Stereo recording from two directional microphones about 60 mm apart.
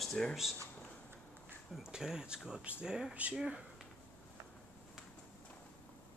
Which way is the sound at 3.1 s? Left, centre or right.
Right.